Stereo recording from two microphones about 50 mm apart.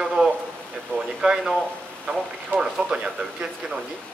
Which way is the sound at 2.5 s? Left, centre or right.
Centre.